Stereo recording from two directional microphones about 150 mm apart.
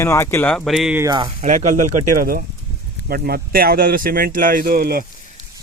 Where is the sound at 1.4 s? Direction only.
60° right (ahead or behind).